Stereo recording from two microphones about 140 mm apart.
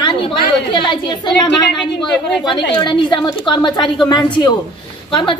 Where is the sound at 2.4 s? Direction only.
30° left (ahead or behind).